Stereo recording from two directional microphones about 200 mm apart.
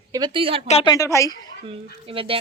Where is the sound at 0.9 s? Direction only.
15° left (ahead or behind).